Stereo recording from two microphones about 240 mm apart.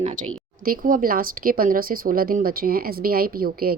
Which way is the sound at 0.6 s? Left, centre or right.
Right.